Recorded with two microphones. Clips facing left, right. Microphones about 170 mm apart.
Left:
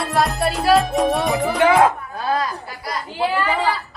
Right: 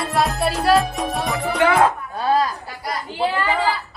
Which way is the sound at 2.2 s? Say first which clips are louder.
Right 3 dB; 20° right (ahead or behind).